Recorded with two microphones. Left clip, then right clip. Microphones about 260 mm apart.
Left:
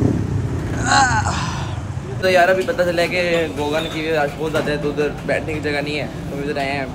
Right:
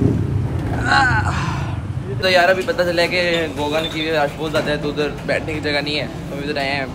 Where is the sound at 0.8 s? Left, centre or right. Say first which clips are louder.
Even; centre.